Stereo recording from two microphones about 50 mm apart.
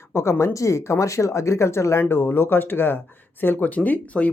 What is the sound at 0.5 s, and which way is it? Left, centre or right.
Speech, left.